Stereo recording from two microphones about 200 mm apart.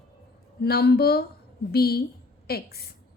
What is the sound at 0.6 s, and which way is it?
A woman's voice, 50° left (ahead or behind).